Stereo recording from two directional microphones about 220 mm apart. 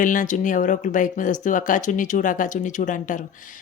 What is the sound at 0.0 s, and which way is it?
Speech, 35° left (ahead or behind).